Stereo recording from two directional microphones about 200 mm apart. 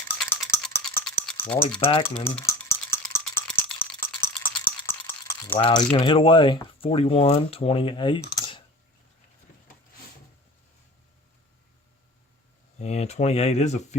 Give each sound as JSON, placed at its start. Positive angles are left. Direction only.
{"t": 0.2, "sound": "rattle", "side_deg": 0}
{"t": 1.3, "sound": "a sound", "side_deg": 5}
{"t": 1.8, "sound": "speech", "side_deg": 25}
{"t": 2.1, "sound": "stir", "side_deg": 10}
{"t": 3.1, "sound": "a sound", "side_deg": 10}
{"t": 5.5, "sound": "speech", "side_deg": 25}
{"t": 8.4, "sound": "typing", "side_deg": 25}
{"t": 12.8, "sound": "speech", "side_deg": 35}